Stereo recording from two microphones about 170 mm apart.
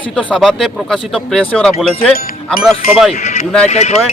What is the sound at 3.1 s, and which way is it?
Speech, 40° left (ahead or behind).